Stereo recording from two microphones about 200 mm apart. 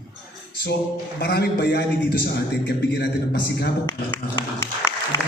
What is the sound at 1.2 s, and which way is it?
A man's voice, 55° left (ahead or behind).